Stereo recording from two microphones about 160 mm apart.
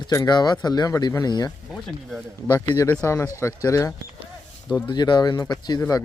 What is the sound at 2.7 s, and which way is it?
A man's voice, 20° left (ahead or behind).